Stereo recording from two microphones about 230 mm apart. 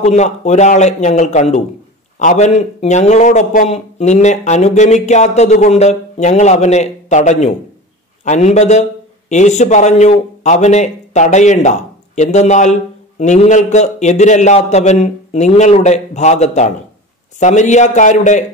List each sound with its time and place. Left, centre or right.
0.0 s a man's voice: left